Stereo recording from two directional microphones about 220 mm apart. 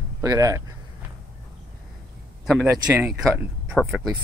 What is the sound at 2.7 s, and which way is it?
Speech, 10° right (ahead or behind).